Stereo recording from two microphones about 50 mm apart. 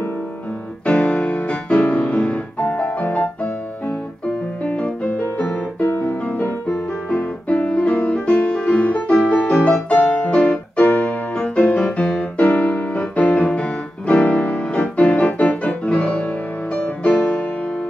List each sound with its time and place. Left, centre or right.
0.8 s music: left
4.6 s music: left
5.2 s music: left
8.5 s music: centre
8.8 s piano: left
16.7 s music: left